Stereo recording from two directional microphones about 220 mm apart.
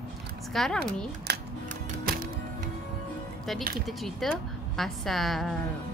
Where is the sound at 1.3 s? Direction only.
50° right (ahead or behind).